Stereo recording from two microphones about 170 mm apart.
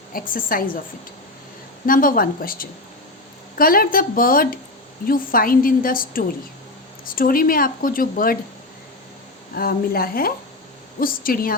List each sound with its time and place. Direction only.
0.1 s speech: 55° left (ahead or behind)
1.9 s speech: 55° left (ahead or behind)
9.6 s speech: 60° left (ahead or behind)